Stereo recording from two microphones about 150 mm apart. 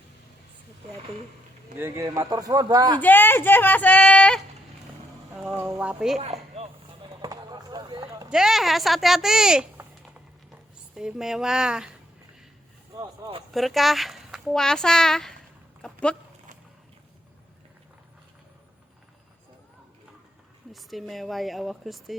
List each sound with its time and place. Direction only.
1.8 s speech: 20° right (ahead or behind)
3.0 s speech: 10° left (ahead or behind)
5.5 s speech: 20° right (ahead or behind)
5.8 s speech: 5° right (ahead or behind)
6.1 s a sound: 45° right (ahead or behind)
7.2 s a sound: 30° right (ahead or behind)
8.3 s speech: 5° right (ahead or behind)
10.9 s speech: 5° right (ahead or behind)
13.0 s a sound: 30° right (ahead or behind)
13.5 s a child's voice: centre (ahead or behind)
15.8 s goat: 5° left (ahead or behind)
20.7 s speech: centre (ahead or behind)